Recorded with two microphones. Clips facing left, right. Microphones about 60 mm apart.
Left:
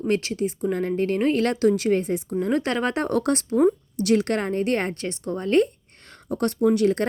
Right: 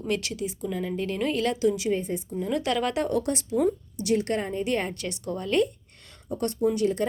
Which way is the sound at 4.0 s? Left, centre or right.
Left.